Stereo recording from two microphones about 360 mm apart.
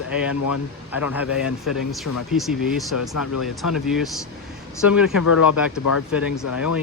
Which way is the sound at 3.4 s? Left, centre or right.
Centre.